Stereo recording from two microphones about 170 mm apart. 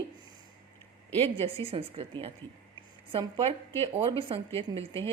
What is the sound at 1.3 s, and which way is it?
A man's voice, 35° right (ahead or behind).